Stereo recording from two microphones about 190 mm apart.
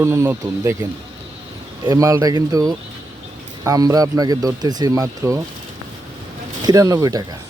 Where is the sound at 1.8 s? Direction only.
20° right (ahead or behind).